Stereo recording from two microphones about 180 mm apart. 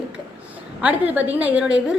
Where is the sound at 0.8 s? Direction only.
10° right (ahead or behind).